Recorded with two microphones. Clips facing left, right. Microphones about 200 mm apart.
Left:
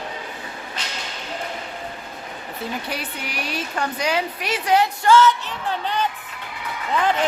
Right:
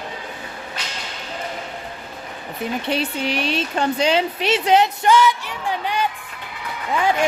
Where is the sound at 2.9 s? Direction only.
25° right (ahead or behind).